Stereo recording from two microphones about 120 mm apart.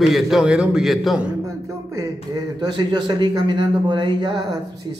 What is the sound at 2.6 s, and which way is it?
Speech, 40° right (ahead or behind).